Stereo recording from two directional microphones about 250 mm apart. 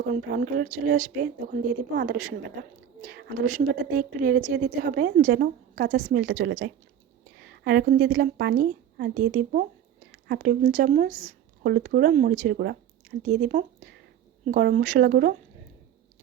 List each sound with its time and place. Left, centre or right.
0.1 s a woman's voice: right